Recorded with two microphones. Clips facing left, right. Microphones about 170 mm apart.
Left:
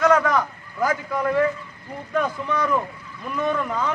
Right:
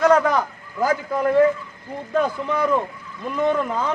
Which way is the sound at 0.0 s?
30° right (ahead or behind).